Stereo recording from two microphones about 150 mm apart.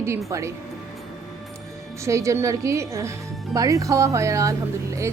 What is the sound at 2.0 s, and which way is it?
A woman's voice, 20° right (ahead or behind).